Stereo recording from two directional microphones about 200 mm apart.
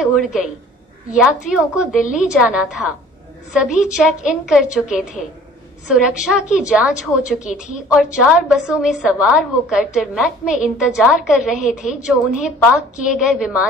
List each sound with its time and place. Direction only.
0.0 s a woman's voice: 5° right (ahead or behind)
1.5 s a woman's voice: 5° right (ahead or behind)